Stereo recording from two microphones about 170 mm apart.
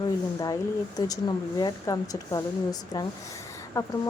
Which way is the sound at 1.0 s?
25° left (ahead or behind).